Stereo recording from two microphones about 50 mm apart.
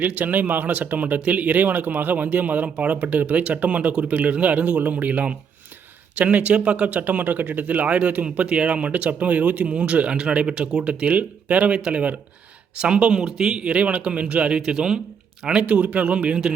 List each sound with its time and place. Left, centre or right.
0.0 s a man's voice: right; by 11.1 s centre
11.1 s speech: right; by 13.7 s centre
13.7 s speech: right